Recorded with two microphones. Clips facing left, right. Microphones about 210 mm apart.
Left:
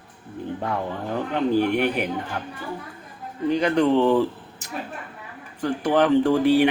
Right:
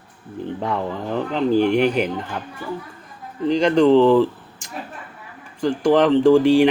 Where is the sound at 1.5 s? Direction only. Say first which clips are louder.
Right 4 dB; 30° right (ahead or behind).